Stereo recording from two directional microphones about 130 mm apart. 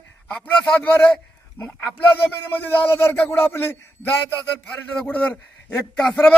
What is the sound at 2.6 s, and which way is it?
A man's voice, 15° left (ahead or behind).